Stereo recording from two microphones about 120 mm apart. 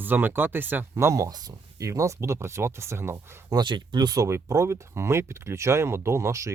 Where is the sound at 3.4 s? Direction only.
35° right (ahead or behind).